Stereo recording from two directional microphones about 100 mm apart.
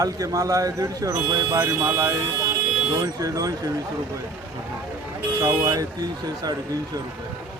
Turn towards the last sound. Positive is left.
turn(degrees=-40)  # may be behind; listen again after turning